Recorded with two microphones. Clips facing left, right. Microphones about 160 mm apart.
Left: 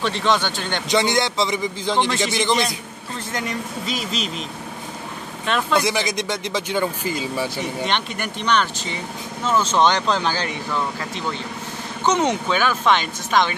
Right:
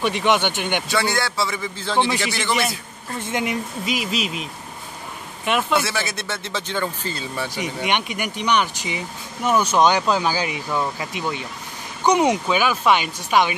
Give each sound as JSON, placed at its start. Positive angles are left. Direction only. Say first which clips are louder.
{"t": 0.0, "sound": "speech", "louder": "right 1 dB", "side_deg": -15}
{"t": 0.8, "sound": "a man's voice", "louder": "left 8 dB", "side_deg": 20}
{"t": 3.3, "sound": "speech", "louder": "right 3 dB", "side_deg": -20}
{"t": 5.8, "sound": "speech", "louder": "left 3 dB", "side_deg": 15}
{"t": 7.5, "sound": "speech", "louder": "even", "side_deg": -15}